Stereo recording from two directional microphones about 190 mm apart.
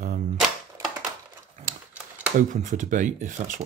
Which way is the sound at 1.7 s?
50° right (ahead or behind).